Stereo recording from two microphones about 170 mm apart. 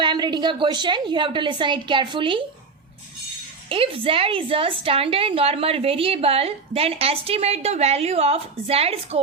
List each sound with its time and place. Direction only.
0.0 s a woman's voice: 25° right (ahead or behind)
3.7 s a woman's voice: 30° right (ahead or behind)